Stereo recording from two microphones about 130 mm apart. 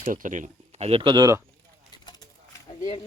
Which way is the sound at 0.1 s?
85° right.